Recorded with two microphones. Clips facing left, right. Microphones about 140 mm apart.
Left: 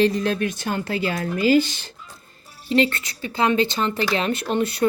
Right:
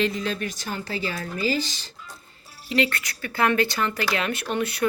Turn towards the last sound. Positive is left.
turn(degrees=30)  # may be behind; listen again after turning